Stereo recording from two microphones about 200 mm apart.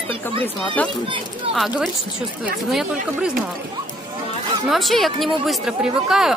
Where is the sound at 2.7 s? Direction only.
5° right (ahead or behind).